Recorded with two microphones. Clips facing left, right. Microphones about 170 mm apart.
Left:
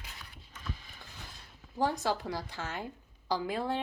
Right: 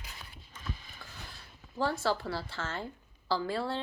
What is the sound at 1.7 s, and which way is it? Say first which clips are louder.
A woman's voice: even; 15° left (ahead or behind).